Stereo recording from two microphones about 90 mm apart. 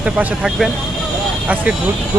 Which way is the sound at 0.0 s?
10° right (ahead or behind).